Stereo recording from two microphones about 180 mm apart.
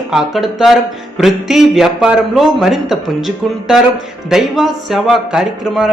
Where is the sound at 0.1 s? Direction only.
Centre (ahead or behind).